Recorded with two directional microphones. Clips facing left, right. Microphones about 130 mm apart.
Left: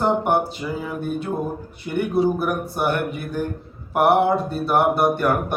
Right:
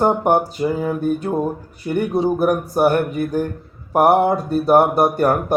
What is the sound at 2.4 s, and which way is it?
Speech, 45° right (ahead or behind).